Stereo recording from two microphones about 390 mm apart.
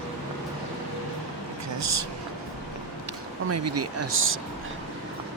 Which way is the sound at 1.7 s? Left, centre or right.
Right.